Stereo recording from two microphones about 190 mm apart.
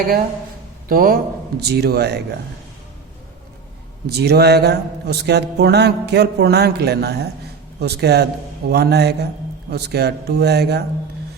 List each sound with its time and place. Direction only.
0.9 s music: 50° right (ahead or behind)
4.0 s music: 60° right (ahead or behind)